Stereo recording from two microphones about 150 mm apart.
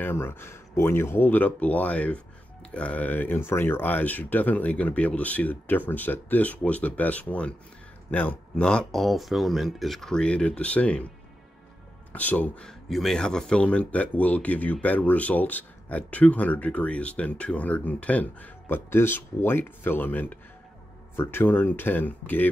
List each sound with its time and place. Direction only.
0.0 s speech: 15° left (ahead or behind)
12.1 s speech: 10° left (ahead or behind)